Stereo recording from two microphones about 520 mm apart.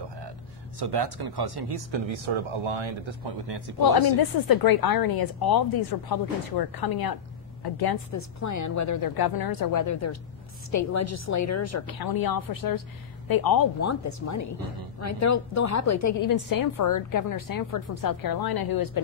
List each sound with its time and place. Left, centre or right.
0.7 s speech: right
3.8 s speech: left
8.1 s a woman's voice: left
13.7 s a woman's voice: left